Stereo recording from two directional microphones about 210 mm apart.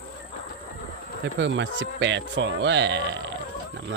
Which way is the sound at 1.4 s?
60° right (ahead or behind).